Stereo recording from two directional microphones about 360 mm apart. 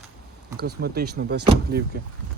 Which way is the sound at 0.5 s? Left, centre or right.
Right.